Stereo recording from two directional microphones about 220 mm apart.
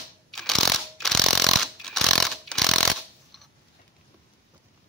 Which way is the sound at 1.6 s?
Centre (ahead or behind).